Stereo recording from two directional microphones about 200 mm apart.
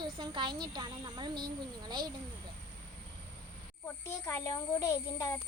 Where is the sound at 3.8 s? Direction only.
10° left (ahead or behind).